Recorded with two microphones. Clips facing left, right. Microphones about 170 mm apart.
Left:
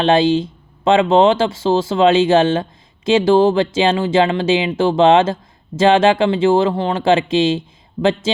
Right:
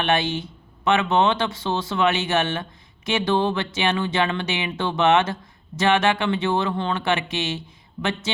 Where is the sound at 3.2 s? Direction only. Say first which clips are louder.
Left 9 dB; 90° left.